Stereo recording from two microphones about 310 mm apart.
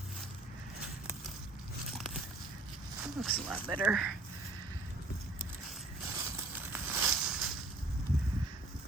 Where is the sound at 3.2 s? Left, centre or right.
Centre.